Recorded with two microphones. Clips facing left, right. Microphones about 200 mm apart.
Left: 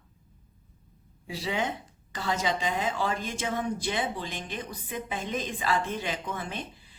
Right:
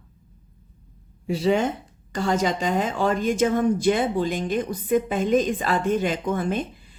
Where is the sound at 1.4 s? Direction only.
50° right (ahead or behind).